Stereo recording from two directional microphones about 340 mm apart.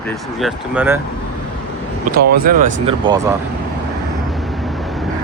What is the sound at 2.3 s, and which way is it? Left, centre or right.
Speech, right.